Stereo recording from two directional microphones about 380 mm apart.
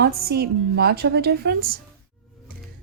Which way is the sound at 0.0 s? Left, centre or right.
Right.